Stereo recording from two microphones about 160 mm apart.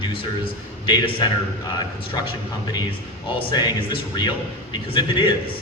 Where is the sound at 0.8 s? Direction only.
30° left (ahead or behind).